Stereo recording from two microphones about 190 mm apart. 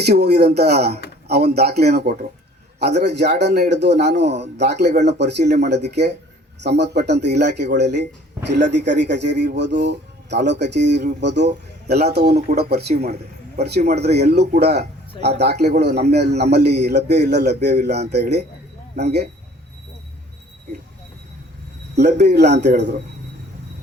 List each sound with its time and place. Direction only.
0.0 s speech: 60° right (ahead or behind)
5.4 s speech: 40° right (ahead or behind)
5.6 s speech: 65° right (ahead or behind)
21.9 s speech: 60° right (ahead or behind)